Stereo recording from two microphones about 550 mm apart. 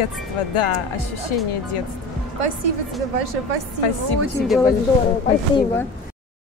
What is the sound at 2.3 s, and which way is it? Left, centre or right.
Speech, right.